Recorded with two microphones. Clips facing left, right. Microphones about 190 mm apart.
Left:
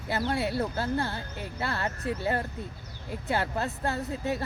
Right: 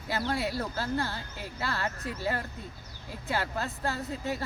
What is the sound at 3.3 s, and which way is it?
A woman's voice, 25° left (ahead or behind).